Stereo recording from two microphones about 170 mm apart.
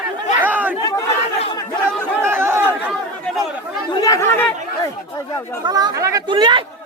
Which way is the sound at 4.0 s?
20° left (ahead or behind).